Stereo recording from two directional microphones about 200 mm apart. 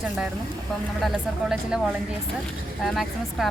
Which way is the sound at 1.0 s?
Centre (ahead or behind).